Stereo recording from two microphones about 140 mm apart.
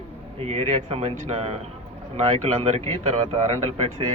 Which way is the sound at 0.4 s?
50° right (ahead or behind).